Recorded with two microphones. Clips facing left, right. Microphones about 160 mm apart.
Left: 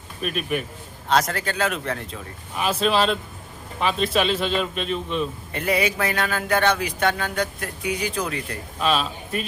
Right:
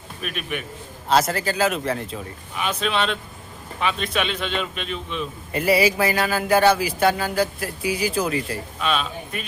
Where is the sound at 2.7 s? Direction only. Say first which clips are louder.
Left 4 dB; 35° left (ahead or behind).